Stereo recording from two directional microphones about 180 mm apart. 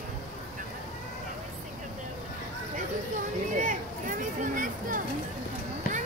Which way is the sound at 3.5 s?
45° right (ahead or behind).